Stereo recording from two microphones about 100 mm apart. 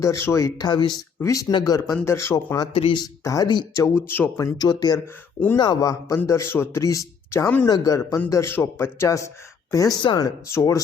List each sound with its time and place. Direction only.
0.0 s speech: 30° left (ahead or behind)
0.6 s speech: 45° left (ahead or behind)
1.2 s speech: 35° left (ahead or behind)
2.0 s speech: 25° left (ahead or behind)
2.7 s speech: 65° left (ahead or behind)
3.0 s speech: 40° left (ahead or behind)
3.8 s speech: 25° left (ahead or behind)
4.4 s speech: 35° left (ahead or behind)